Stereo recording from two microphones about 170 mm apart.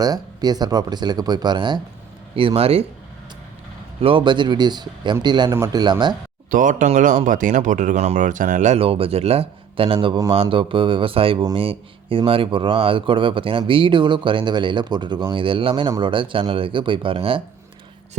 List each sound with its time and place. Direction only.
0.0 s speech: 20° right (ahead or behind)
4.0 s speech: 30° right (ahead or behind)
6.5 s speech: 50° right (ahead or behind); by 17.4 s 30° right (ahead or behind)